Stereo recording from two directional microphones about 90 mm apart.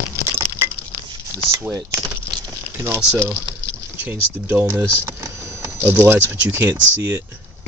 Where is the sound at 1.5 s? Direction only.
35° right (ahead or behind).